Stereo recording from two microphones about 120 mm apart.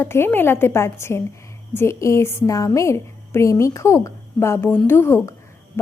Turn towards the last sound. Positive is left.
turn(degrees=20)  # may be behind; listen again after turning